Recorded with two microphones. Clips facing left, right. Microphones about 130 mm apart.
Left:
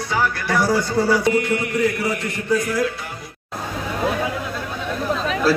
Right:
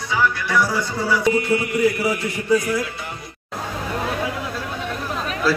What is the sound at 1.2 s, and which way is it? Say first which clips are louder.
Mantra: even; centre (ahead or behind).